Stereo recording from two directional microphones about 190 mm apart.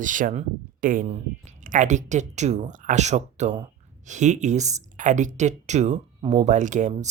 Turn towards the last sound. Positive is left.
turn(degrees=-40)  # may be behind; listen again after turning